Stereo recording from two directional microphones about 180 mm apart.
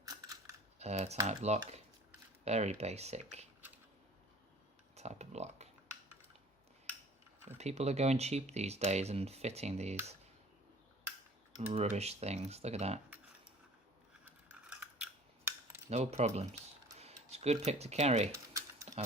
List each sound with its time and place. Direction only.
0.0 s a sound: 20° right (ahead or behind)
0.8 s speech: 35° right (ahead or behind)
4.9 s speech: 40° right (ahead or behind)
7.6 s speech: 35° right (ahead or behind)
11.7 s speech: 35° right (ahead or behind)
14.3 s scissors: 10° right (ahead or behind)
15.9 s speech: 35° right (ahead or behind)
18.9 s a sound: 40° right (ahead or behind)